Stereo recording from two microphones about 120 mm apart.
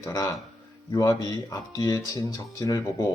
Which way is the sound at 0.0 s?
30° left (ahead or behind).